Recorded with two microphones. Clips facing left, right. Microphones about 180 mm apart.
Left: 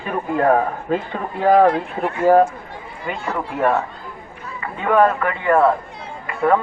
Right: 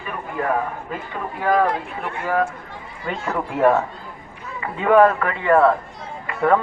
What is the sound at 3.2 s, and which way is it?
Speech, centre (ahead or behind).